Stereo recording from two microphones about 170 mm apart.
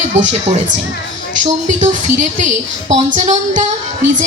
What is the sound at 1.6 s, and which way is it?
Speech, 45° right (ahead or behind).